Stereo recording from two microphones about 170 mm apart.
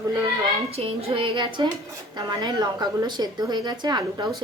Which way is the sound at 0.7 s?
35° right (ahead or behind).